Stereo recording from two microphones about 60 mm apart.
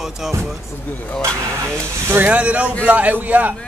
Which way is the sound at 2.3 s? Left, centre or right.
Right.